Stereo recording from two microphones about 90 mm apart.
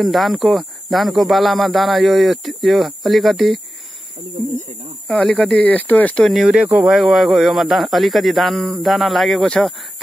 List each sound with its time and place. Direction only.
0.0 s speech: centre (ahead or behind)
5.2 s speech: 5° left (ahead or behind)
6.2 s speech: 5° right (ahead or behind)